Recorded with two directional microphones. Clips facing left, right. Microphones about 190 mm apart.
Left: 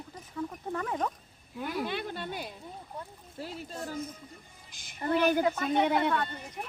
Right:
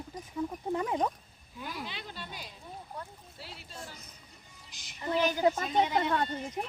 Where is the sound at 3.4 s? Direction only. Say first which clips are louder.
Left 8 dB; 45° left (ahead or behind).